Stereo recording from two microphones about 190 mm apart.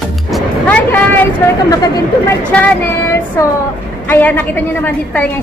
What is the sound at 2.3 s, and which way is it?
A woman's voice, 10° left (ahead or behind).